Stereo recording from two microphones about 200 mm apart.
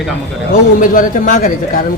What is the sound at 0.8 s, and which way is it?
Speech, 40° left (ahead or behind).